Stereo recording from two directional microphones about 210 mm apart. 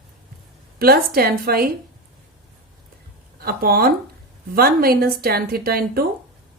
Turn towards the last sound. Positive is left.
turn(degrees=-45)  # may be behind; listen again after turning